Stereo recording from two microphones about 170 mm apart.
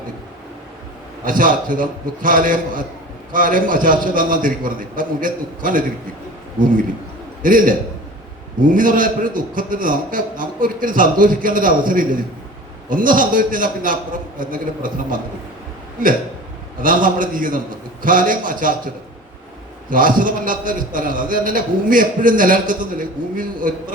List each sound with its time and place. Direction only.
1.2 s a man's voice: 50° right (ahead or behind)
7.4 s a man's voice: 55° right (ahead or behind)
16.8 s a man's voice: 55° right (ahead or behind)
19.9 s a man's voice: 55° right (ahead or behind)